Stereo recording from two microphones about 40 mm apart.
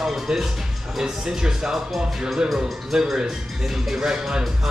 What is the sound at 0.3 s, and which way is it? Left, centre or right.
Speech, centre.